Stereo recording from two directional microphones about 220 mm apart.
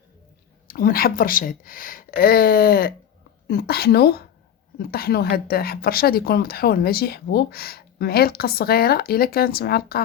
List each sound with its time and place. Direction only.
0.7 s speech: 40° left (ahead or behind)